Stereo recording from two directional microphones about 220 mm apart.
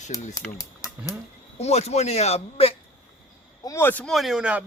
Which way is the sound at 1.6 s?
30° left (ahead or behind).